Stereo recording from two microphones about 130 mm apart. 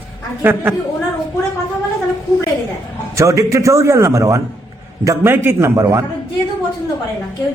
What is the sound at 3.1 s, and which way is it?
A man's voice, 25° right (ahead or behind).